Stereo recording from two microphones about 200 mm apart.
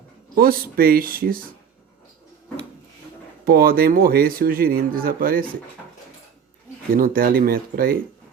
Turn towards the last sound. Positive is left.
turn(degrees=-45)  # may be behind; listen again after turning